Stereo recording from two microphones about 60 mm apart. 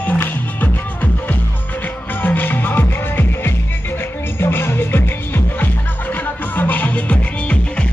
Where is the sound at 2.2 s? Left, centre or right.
Left.